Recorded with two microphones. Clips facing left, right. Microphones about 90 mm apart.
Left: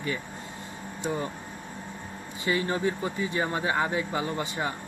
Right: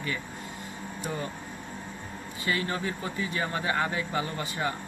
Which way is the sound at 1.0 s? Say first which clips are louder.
Left 4 dB; 25° left (ahead or behind).